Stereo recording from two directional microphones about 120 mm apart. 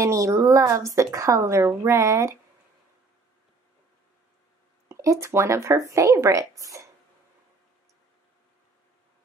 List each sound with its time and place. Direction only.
0.0 s a woman's voice: 25° right (ahead or behind)
4.8 s a woman's voice: 25° right (ahead or behind)